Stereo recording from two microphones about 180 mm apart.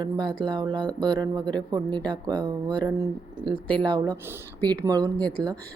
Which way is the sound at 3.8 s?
25° right (ahead or behind).